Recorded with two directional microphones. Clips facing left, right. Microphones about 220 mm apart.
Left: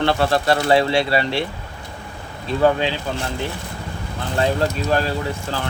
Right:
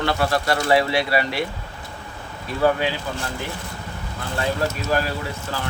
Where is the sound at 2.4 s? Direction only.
25° left (ahead or behind).